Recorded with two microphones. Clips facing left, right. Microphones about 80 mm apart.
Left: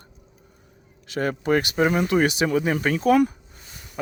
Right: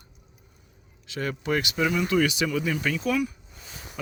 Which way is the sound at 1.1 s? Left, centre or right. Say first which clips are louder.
Left 6 dB; left.